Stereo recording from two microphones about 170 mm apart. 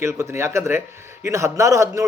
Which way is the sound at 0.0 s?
15° right (ahead or behind).